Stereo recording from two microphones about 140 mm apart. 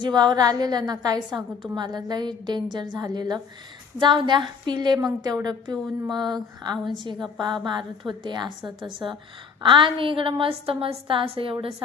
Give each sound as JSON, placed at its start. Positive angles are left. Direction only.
{"t": 0.0, "sound": "a woman's voice", "side_deg": -30}